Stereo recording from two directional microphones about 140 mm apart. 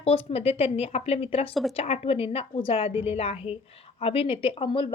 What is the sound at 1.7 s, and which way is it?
A woman's voice, 45° left (ahead or behind).